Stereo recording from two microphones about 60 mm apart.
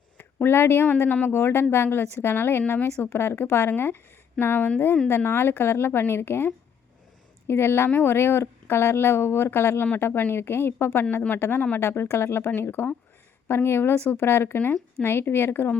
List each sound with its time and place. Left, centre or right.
0.4 s a woman's voice: left